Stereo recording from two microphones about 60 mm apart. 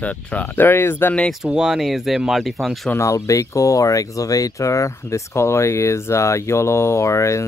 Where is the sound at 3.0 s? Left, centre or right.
Left.